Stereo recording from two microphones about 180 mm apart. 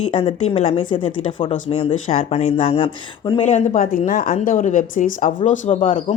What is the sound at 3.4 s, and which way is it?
A woman's voice, 40° left (ahead or behind).